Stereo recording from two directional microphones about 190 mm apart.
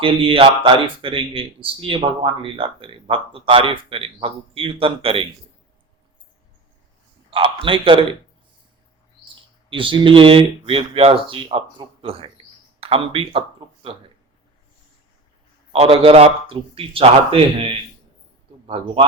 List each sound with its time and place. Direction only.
0.0 s speech: 25° right (ahead or behind)
7.3 s speech: 30° right (ahead or behind)
9.3 s speech: 25° right (ahead or behind)
15.7 s speech: 30° right (ahead or behind)